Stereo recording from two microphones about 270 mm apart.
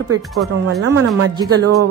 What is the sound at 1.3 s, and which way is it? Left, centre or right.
Music, centre.